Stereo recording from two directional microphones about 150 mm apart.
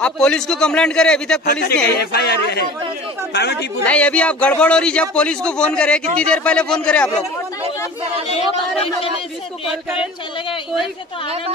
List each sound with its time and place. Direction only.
0.0 s a man's voice: 5° left (ahead or behind)
1.4 s speech: 85° left
3.8 s a man's voice: 10° left (ahead or behind)